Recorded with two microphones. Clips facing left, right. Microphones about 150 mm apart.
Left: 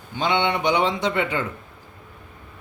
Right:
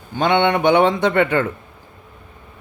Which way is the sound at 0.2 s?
55° right (ahead or behind).